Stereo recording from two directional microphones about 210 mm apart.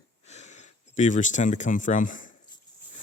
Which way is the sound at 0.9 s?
35° left (ahead or behind).